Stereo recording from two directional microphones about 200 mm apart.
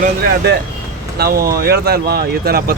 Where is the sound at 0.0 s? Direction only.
55° right (ahead or behind).